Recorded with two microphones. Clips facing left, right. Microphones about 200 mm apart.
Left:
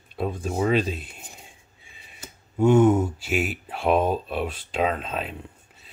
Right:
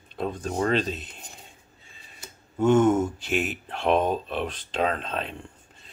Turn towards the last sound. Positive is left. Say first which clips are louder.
# left 1 dB
turn(degrees=5)  # may be behind; listen again after turning